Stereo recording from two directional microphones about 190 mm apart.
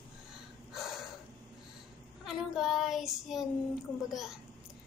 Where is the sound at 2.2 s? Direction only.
Centre (ahead or behind).